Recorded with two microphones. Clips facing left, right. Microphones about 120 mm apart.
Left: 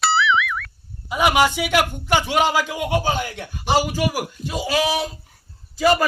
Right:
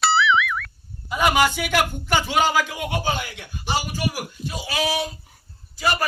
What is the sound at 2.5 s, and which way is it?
Speech, 25° left (ahead or behind).